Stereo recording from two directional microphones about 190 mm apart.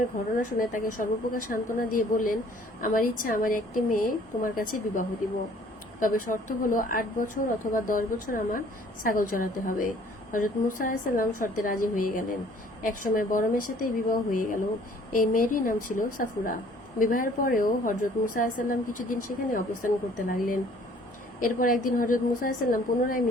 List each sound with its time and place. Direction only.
0.7 s a woman's voice: 45° left (ahead or behind)